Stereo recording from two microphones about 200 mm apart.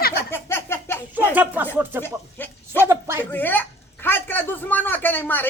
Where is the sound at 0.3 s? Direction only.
10° left (ahead or behind).